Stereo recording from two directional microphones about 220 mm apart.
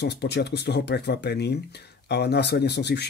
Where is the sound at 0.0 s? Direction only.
50° left (ahead or behind).